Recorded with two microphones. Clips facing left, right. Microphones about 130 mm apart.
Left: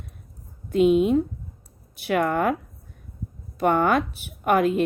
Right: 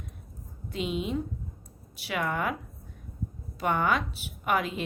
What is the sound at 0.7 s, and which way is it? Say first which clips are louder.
Speech: left 13 dB; 50° left (ahead or behind).